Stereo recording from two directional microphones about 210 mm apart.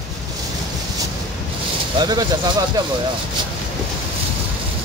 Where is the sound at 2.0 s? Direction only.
20° right (ahead or behind).